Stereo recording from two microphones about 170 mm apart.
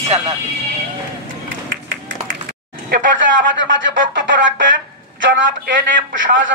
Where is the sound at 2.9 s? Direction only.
90° right.